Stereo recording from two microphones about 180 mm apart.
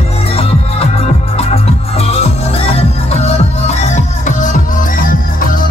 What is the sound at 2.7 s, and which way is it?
Music, 35° left (ahead or behind).